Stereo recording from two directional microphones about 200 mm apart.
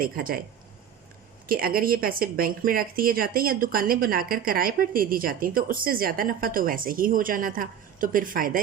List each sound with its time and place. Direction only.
0.0 s a woman's voice: 45° right (ahead or behind)
1.5 s a woman's voice: 45° right (ahead or behind)